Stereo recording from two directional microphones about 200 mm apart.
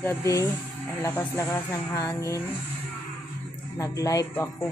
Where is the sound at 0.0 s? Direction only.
15° left (ahead or behind).